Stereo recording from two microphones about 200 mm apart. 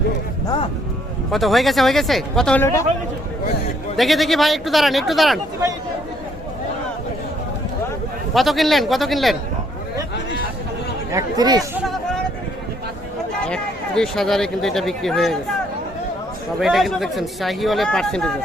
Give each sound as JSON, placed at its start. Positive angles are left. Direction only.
{"t": 0.4, "sound": "speech", "side_deg": 25}
{"t": 1.3, "sound": "speech", "side_deg": 0}
{"t": 3.9, "sound": "speech", "side_deg": 0}
{"t": 8.3, "sound": "speech", "side_deg": 0}
{"t": 11.1, "sound": "speech", "side_deg": -15}
{"t": 11.8, "sound": "a sound", "side_deg": 0}
{"t": 13.5, "sound": "speech", "side_deg": 5}
{"t": 16.6, "sound": "speech", "side_deg": 0}